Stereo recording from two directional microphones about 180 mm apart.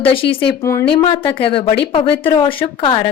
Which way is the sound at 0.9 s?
30° left (ahead or behind).